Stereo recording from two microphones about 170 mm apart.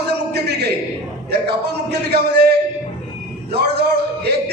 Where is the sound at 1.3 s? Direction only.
70° right (ahead or behind).